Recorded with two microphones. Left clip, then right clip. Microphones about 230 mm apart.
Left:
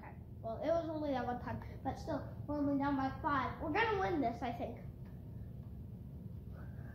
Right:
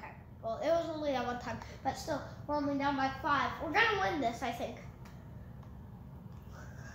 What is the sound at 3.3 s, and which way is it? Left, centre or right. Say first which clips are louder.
A child's voice: right 3 dB; right.